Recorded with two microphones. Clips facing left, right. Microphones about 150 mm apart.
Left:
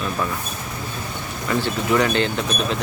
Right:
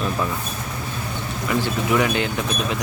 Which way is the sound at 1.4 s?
10° right (ahead or behind).